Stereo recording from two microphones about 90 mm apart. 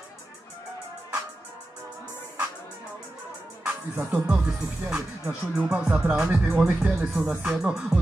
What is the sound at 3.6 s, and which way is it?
Music, 15° right (ahead or behind).